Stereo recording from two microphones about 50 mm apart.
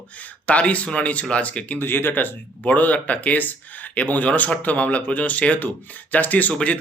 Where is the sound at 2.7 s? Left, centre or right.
Left.